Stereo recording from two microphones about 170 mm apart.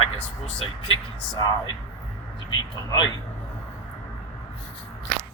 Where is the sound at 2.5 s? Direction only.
25° left (ahead or behind).